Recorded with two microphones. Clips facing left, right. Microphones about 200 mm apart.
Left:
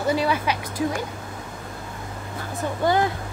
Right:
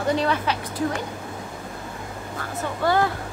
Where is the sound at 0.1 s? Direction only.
10° left (ahead or behind).